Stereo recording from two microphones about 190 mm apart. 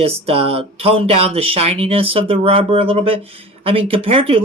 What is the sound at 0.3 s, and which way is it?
Speech, 30° right (ahead or behind).